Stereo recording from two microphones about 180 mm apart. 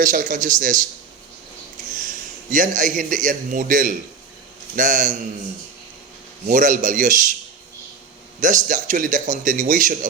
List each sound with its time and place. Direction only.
0.0 s a man's voice: 45° right (ahead or behind)
2.0 s a man's voice: 45° right (ahead or behind)
6.5 s a man's voice: 45° right (ahead or behind)
8.4 s a man's voice: 45° right (ahead or behind)